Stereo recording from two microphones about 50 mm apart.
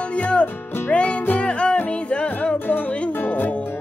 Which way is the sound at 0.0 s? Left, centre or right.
Left.